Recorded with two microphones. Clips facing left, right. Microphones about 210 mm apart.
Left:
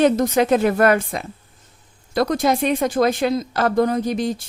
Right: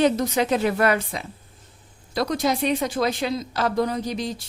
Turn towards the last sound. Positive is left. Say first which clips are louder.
# left 6 dB
turn(degrees=50)  # may be behind; listen again after turning